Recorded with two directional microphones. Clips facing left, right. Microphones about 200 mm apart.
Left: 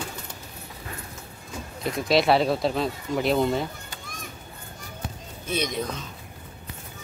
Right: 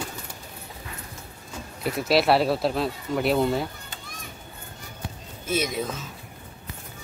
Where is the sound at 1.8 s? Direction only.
5° right (ahead or behind).